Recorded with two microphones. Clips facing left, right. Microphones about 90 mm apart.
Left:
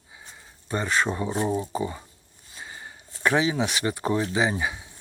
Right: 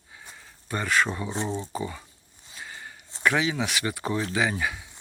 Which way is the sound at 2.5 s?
25° left (ahead or behind).